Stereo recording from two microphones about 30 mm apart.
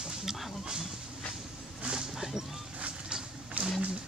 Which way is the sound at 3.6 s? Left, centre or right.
Right.